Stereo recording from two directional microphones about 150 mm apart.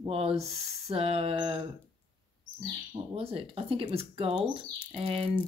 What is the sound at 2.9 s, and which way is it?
Speech, 40° right (ahead or behind).